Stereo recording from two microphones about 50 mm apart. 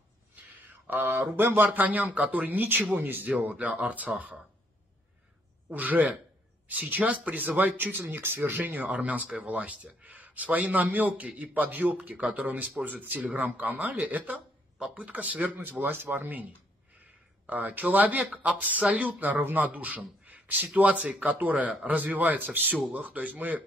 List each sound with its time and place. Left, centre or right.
0.8 s speech: right
5.7 s speech: right
17.5 s speech: right